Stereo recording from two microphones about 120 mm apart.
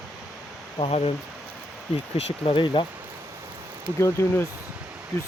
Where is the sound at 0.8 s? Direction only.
55° left (ahead or behind).